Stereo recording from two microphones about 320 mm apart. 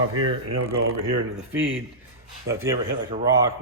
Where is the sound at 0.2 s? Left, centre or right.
Right.